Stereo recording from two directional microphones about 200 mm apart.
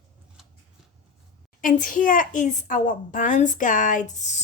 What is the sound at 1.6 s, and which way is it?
Speech, 40° left (ahead or behind).